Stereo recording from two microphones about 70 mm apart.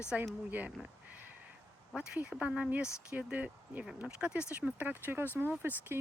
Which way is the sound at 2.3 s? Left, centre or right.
Centre.